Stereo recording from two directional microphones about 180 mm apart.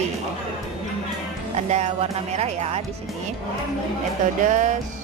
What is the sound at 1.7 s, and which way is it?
Speech, 35° right (ahead or behind).